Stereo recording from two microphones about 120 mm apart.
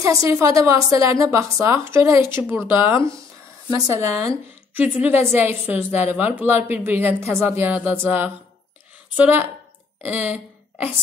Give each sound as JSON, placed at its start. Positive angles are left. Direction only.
{"t": 0.0, "sound": "a woman's voice", "side_deg": -30}
{"t": 4.7, "sound": "a woman's voice", "side_deg": -15}